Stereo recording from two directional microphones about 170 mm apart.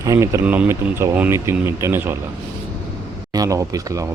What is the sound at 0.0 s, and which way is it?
Speech, 20° right (ahead or behind).